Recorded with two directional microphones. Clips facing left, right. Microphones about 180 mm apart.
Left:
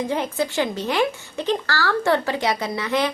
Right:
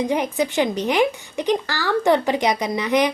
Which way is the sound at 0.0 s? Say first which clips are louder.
Right 3 dB; 15° right (ahead or behind).